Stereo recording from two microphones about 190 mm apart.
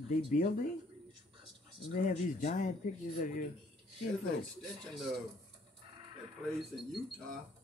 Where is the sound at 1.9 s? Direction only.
45° left (ahead or behind).